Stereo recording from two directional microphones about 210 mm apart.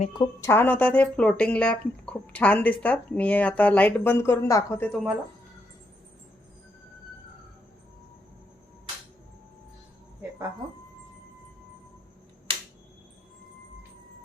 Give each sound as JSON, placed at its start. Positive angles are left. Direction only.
{"t": 0.1, "sound": "speech", "side_deg": 20}
{"t": 0.5, "sound": "speech", "side_deg": 10}